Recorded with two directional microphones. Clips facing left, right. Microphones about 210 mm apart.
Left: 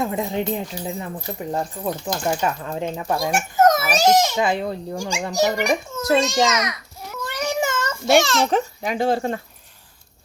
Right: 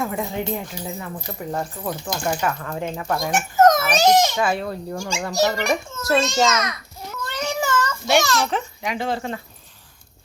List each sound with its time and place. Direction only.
0.0 s a child's voice: 20° left (ahead or behind); by 4.3 s 5° left (ahead or behind)
4.4 s a child's voice: 20° left (ahead or behind)
7.3 s cat: 15° left (ahead or behind)
8.2 s speech: 25° left (ahead or behind)
8.4 s a child's voice: 40° left (ahead or behind)